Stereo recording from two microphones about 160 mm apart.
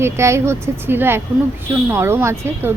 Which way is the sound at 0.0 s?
15° right (ahead or behind).